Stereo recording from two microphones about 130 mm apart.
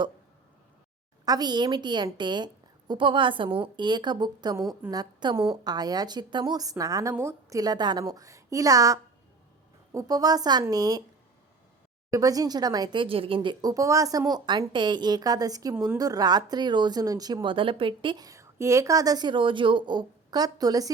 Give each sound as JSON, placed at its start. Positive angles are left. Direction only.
{"t": 1.2, "sound": "a woman's voice", "side_deg": -30}
{"t": 12.1, "sound": "speech", "side_deg": -30}
{"t": 18.3, "sound": "speech", "side_deg": -25}